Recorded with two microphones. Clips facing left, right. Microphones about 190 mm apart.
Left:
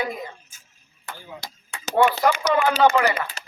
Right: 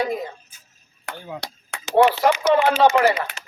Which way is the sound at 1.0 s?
65° right (ahead or behind).